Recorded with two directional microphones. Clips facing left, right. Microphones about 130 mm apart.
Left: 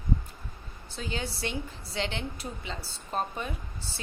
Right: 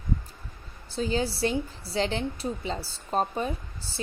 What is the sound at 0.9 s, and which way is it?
A woman's voice, 35° right (ahead or behind).